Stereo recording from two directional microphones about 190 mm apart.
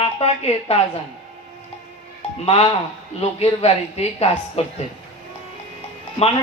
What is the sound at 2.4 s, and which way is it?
A man's voice, 30° left (ahead or behind).